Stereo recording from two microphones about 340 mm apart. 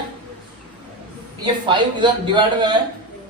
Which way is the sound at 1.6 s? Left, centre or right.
Centre.